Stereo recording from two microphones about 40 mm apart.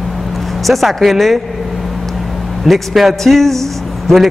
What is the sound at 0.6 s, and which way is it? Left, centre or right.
Speech, centre.